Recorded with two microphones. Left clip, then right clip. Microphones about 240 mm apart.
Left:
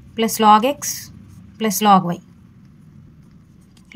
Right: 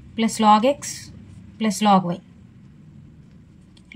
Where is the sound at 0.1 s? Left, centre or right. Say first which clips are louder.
Left 4 dB; left.